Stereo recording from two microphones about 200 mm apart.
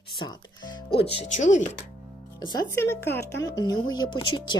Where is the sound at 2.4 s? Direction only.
20° left (ahead or behind).